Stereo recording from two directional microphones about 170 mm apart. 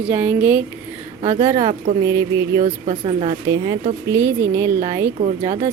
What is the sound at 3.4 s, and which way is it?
Speech, 20° right (ahead or behind).